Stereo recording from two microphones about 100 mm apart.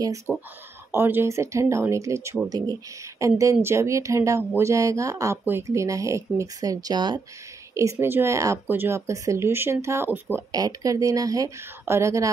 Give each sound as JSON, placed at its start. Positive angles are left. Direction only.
{"t": 0.3, "sound": "speech", "side_deg": -10}
{"t": 0.9, "sound": "speech", "side_deg": -25}
{"t": 7.7, "sound": "speech", "side_deg": -30}
{"t": 10.5, "sound": "speech", "side_deg": -35}